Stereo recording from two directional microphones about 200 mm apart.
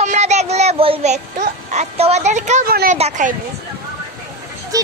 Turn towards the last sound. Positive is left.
turn(degrees=-15)  # may be behind; listen again after turning